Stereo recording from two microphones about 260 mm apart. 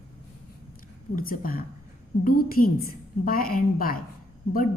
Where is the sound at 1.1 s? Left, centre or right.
Left.